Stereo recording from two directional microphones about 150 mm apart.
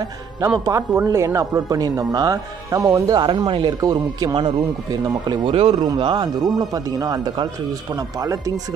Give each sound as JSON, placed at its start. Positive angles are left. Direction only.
{"t": 0.7, "sound": "speech", "side_deg": -20}